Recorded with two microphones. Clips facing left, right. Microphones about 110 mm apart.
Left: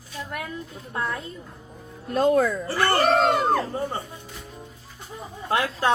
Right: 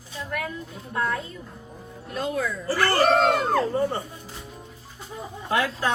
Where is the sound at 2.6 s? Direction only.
25° left (ahead or behind).